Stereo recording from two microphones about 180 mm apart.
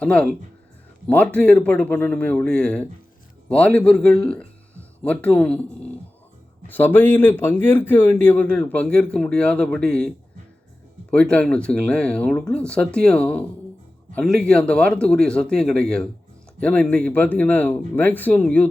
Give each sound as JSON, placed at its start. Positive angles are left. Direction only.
{"t": 0.0, "sound": "a man's voice", "side_deg": 5}
{"t": 6.7, "sound": "speech", "side_deg": 10}